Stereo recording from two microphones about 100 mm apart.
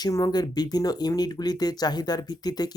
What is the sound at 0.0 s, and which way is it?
Speech, 40° left (ahead or behind).